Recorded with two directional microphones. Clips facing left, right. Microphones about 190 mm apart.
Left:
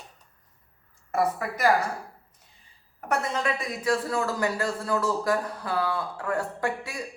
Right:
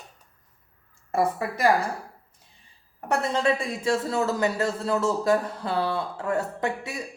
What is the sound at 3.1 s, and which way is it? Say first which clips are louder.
Speech: right 4 dB; 30° right (ahead or behind).